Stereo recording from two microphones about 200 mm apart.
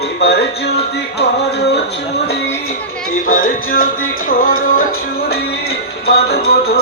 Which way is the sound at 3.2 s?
45° left (ahead or behind).